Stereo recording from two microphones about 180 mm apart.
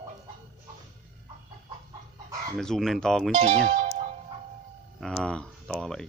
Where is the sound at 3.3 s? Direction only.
35° right (ahead or behind).